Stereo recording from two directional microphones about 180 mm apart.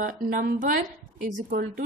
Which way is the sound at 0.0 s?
50° right (ahead or behind).